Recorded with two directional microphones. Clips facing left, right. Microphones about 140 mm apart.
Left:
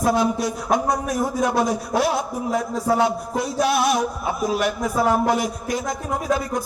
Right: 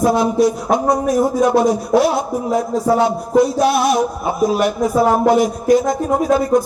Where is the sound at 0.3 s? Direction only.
30° right (ahead or behind).